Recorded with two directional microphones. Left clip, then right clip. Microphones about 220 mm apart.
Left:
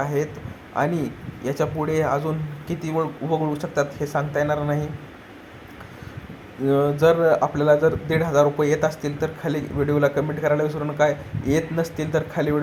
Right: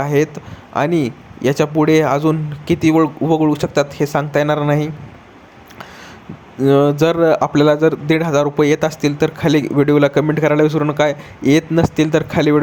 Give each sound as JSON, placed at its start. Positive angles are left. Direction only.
{"t": 0.0, "sound": "a man's voice", "side_deg": -35}
{"t": 6.6, "sound": "a man's voice", "side_deg": -35}